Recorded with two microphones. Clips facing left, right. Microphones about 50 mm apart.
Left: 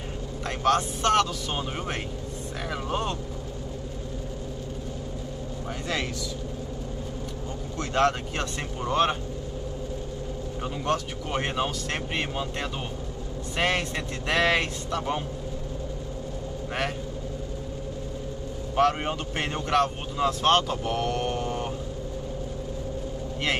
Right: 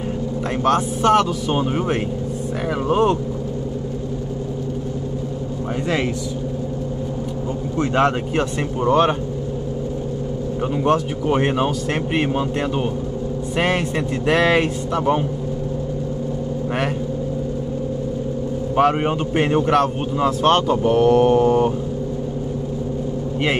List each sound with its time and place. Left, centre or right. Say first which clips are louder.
0.7 s a man's voice: right 6 dB; centre
7.7 s speech: right 6 dB; right
10.6 s a man's voice: right 9 dB; right
18.8 s a man's voice: right 6 dB; centre